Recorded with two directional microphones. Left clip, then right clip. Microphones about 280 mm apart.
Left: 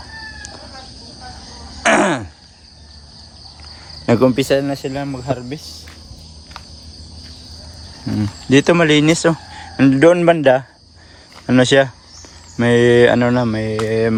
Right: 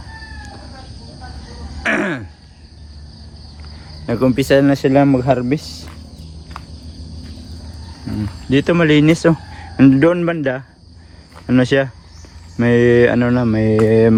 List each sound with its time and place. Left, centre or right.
1.8 s groan: centre
4.0 s speech: left
4.3 s speech: centre
8.1 s cricket: left
8.4 s speech: centre